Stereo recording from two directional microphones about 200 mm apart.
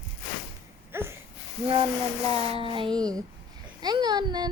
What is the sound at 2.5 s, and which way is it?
A child's voice, 25° right (ahead or behind).